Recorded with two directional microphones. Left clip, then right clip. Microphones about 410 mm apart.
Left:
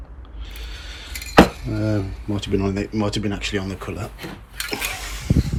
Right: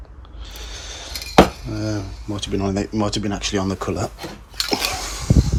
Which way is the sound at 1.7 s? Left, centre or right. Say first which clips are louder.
Left 4 dB; centre.